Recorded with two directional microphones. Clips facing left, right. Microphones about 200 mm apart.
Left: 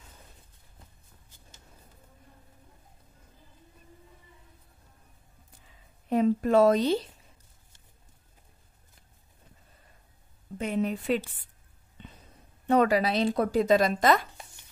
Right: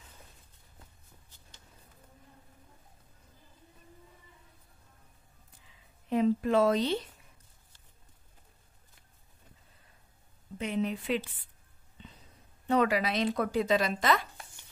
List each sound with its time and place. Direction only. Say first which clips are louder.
6.0 s a woman's voice: left 3 dB; 45° left (ahead or behind)
10.6 s a woman's voice: left 3 dB; 45° left (ahead or behind)
12.6 s a woman's voice: left 4 dB; 40° left (ahead or behind)